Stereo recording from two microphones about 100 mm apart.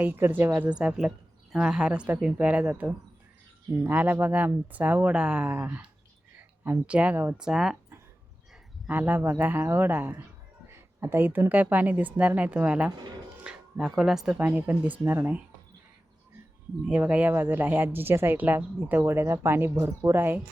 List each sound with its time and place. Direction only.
0.0 s speech: 20° right (ahead or behind)
0.7 s speech: 10° right (ahead or behind)
7.3 s speech: 5° right (ahead or behind)
8.9 s speech: 15° right (ahead or behind)
14.3 s speech: 15° right (ahead or behind)
16.8 s speech: 15° right (ahead or behind)